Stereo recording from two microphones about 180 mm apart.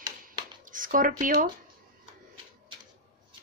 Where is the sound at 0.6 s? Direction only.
50° right (ahead or behind).